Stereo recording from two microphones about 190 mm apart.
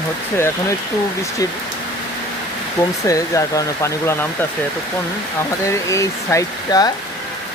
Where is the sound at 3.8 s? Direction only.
15° left (ahead or behind).